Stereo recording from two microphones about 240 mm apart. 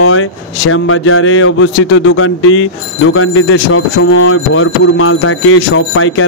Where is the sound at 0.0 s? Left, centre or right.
Left.